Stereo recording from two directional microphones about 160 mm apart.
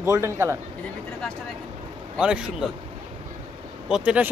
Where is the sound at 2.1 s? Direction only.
5° right (ahead or behind).